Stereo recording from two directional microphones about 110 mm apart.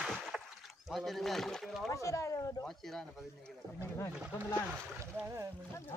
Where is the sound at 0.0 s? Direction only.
Centre (ahead or behind).